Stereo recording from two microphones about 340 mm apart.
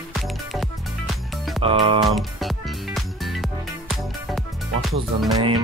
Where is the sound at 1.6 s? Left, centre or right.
Centre.